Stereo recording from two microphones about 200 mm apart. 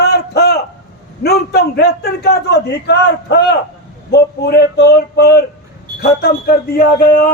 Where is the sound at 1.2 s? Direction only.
55° left (ahead or behind).